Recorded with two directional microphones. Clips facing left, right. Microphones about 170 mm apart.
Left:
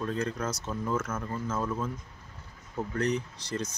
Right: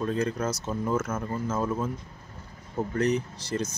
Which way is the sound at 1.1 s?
20° right (ahead or behind).